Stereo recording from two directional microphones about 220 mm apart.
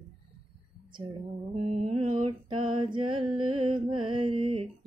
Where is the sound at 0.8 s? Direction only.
20° right (ahead or behind).